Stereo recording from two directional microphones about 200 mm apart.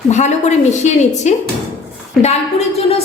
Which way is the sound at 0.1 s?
35° left (ahead or behind).